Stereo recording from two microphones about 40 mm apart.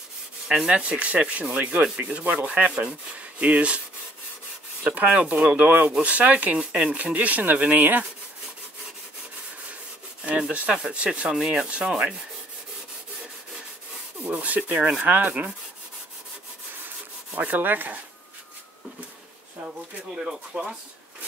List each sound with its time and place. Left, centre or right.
0.7 s speech: right
1.5 s sanding: right
2.2 s speech: right
2.6 s sanding: right
2.9 s speech: right
4.9 s speech: right
10.5 s sanding: right
11.2 s speech: centre
14.2 s speech: right
15.0 s speech: right
17.3 s rub: right
20.2 s speech: centre